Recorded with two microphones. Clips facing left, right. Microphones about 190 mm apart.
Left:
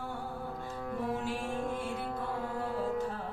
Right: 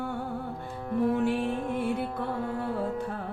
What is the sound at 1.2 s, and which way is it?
Music, 60° right (ahead or behind).